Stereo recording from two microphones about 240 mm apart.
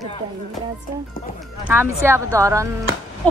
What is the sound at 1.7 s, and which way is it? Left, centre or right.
A woman's voice, centre.